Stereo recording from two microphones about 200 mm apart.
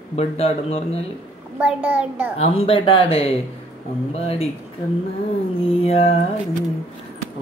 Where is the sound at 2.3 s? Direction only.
30° left (ahead or behind).